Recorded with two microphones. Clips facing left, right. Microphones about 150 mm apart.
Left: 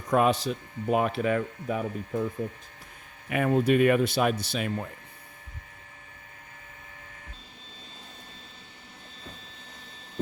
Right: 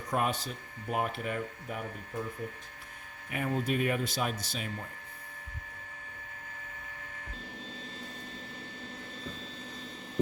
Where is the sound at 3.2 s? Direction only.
90° left; by 4.9 s 70° left (ahead or behind).